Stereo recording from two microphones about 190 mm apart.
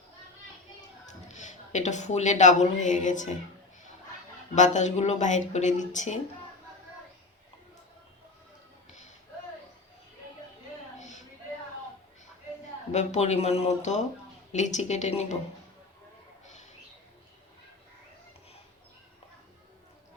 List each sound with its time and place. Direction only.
1.3 s a woman's voice: 40° left (ahead or behind)
4.5 s speech: 40° left (ahead or behind)
8.9 s music: 35° left (ahead or behind)
12.9 s speech: 35° left (ahead or behind)